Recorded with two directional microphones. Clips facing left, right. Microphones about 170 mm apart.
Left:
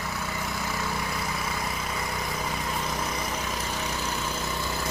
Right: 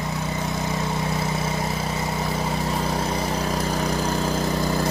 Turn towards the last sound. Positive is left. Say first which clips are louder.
# right 8 dB
turn(degrees=-40)  # may be behind; listen again after turning